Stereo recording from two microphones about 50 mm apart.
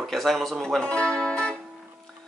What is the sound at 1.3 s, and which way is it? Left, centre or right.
Music, centre.